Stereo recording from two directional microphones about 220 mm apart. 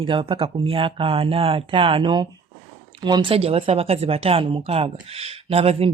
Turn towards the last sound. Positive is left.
turn(degrees=-25)  # may be behind; listen again after turning